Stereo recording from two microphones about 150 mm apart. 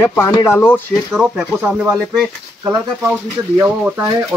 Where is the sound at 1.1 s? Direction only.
10° right (ahead or behind).